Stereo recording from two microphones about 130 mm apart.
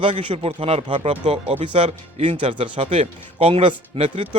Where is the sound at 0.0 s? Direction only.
40° right (ahead or behind).